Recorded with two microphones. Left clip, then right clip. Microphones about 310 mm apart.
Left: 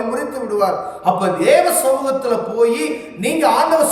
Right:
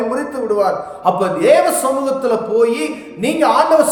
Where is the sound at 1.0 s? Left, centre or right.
Centre.